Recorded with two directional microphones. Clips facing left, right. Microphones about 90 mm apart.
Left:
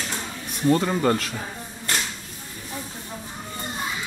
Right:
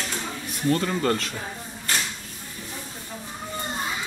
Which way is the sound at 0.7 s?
20° left (ahead or behind).